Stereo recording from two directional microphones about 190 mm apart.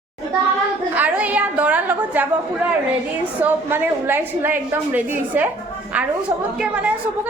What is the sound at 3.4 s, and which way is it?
A woman's voice, 10° right (ahead or behind).